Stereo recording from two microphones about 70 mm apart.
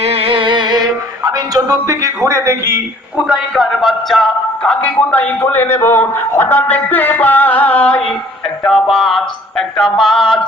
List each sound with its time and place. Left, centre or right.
0.6 s music: right
3.2 s speech: centre
4.6 s a man's voice: centre
8.6 s music: centre